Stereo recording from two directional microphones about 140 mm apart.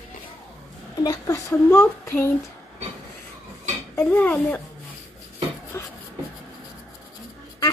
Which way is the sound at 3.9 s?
15° left (ahead or behind).